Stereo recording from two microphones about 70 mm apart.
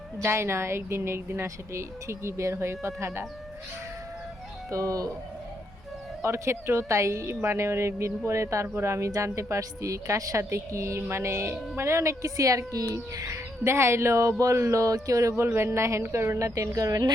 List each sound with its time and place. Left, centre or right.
0.2 s a woman's voice: right
4.7 s speech: right
6.2 s a woman's voice: right